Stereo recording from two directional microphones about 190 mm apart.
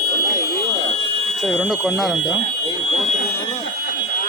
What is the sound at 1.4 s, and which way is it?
A man's voice, 5° right (ahead or behind).